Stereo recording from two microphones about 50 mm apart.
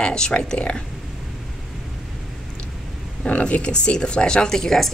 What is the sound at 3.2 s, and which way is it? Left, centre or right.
Speech, left.